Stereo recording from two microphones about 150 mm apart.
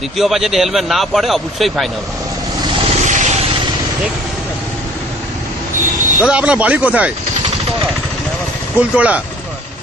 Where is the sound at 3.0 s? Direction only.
55° right (ahead or behind).